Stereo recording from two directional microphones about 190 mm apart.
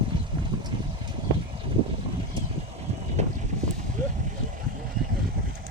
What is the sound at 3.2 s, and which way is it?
Vehicle, 35° right (ahead or behind).